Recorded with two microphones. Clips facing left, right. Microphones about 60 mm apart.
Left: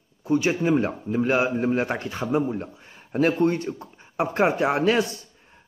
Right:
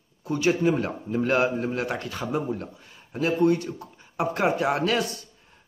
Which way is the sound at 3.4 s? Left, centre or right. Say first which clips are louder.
Right 1 dB; left.